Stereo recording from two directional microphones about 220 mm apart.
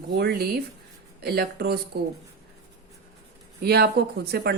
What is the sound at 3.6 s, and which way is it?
Speech, 45° right (ahead or behind).